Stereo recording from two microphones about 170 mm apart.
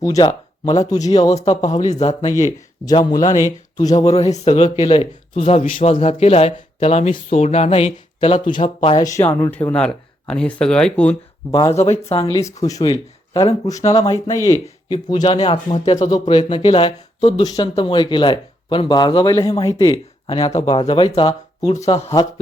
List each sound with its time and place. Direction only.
0.0 s speech: 20° left (ahead or behind)
1.1 s speech: 40° left (ahead or behind)
2.8 s speech: 25° left (ahead or behind)
3.8 s speech: 40° left (ahead or behind)
9.0 s speech: 20° left (ahead or behind)
11.7 s speech: 40° left (ahead or behind)
16.4 s speech: 30° left (ahead or behind)